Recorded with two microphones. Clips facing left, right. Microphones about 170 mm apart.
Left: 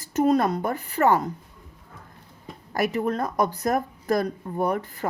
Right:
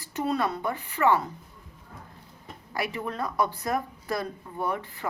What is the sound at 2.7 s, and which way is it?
Speech, 45° left (ahead or behind).